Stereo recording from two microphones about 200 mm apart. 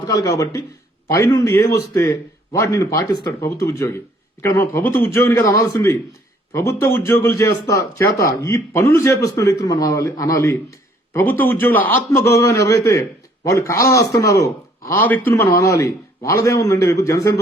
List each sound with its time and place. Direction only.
0.1 s a man's voice: 15° left (ahead or behind)